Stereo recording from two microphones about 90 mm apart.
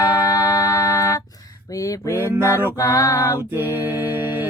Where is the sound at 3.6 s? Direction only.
25° right (ahead or behind).